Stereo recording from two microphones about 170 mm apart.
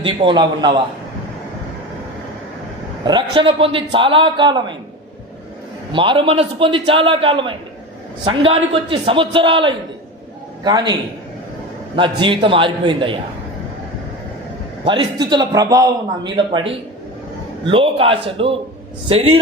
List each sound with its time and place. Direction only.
0.0 s a man's voice: 30° right (ahead or behind)
3.0 s a man's voice: 25° right (ahead or behind)
5.9 s a man's voice: 30° right (ahead or behind)
11.9 s a man's voice: 30° right (ahead or behind)
14.8 s a man's voice: 25° right (ahead or behind)